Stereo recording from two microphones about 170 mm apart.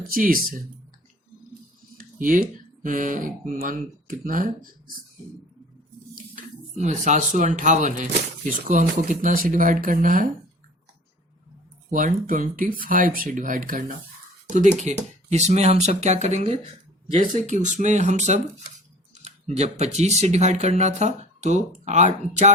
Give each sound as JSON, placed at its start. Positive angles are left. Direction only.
{"t": 0.1, "sound": "speech", "side_deg": -55}
{"t": 2.0, "sound": "speech", "side_deg": -50}
{"t": 6.3, "sound": "speech", "side_deg": -45}
{"t": 11.9, "sound": "speech", "side_deg": -50}